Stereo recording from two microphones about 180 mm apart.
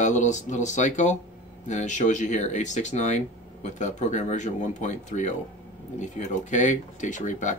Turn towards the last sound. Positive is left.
turn(degrees=45)  # may be behind; listen again after turning